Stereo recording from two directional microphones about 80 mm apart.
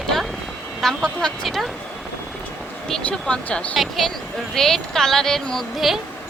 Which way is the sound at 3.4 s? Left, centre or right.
Centre.